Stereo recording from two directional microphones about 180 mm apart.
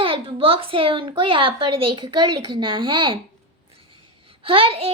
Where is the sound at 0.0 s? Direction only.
30° right (ahead or behind).